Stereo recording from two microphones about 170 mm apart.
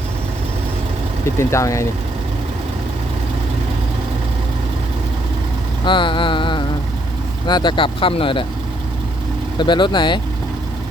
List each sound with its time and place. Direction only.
1.4 s speech: 15° left (ahead or behind)
5.8 s speech: 30° left (ahead or behind)
9.6 s speech: 25° left (ahead or behind)